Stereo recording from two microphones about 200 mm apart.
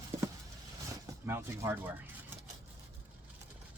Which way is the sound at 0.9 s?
15° right (ahead or behind).